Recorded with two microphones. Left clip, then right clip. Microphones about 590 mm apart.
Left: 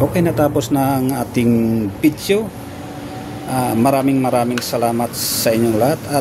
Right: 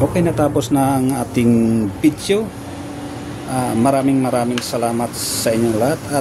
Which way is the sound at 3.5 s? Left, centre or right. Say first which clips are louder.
Left 1 dB; left.